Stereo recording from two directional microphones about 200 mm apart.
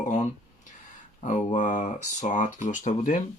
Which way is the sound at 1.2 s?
40° left (ahead or behind).